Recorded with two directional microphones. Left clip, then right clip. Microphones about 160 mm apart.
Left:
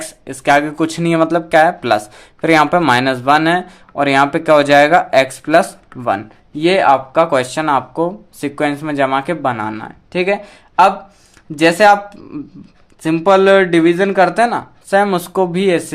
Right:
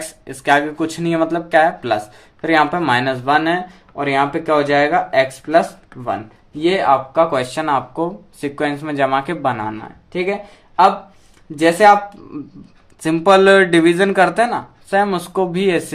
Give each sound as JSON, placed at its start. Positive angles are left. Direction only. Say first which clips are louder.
{"t": 0.0, "sound": "speech", "louder": "left 4 dB", "side_deg": 40}
{"t": 9.7, "sound": "speech", "louder": "left 4 dB", "side_deg": 40}
{"t": 11.6, "sound": "speech", "louder": "left 1 dB", "side_deg": 40}
{"t": 13.0, "sound": "speech", "louder": "left 1 dB", "side_deg": 15}
{"t": 14.3, "sound": "speech", "louder": "left 3 dB", "side_deg": 25}